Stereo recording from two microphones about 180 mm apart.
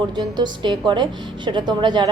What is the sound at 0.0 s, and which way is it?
A woman's voice, 25° right (ahead or behind).